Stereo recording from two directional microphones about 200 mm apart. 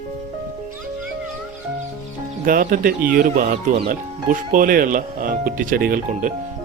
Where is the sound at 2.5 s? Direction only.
45° right (ahead or behind).